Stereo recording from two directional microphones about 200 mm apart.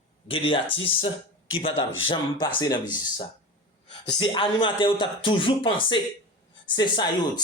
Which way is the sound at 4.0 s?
20° left (ahead or behind).